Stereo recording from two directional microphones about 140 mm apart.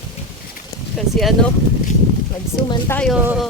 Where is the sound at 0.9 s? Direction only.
Centre (ahead or behind).